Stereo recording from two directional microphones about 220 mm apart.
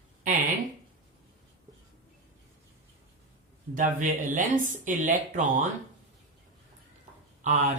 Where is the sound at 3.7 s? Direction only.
35° right (ahead or behind).